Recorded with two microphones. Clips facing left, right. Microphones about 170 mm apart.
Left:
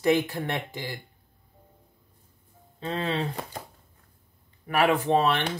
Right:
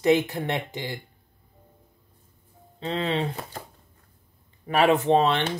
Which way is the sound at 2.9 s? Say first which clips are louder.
Right 2 dB; 15° right (ahead or behind).